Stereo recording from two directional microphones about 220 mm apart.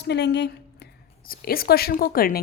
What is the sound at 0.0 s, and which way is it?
A woman's voice, 50° left (ahead or behind).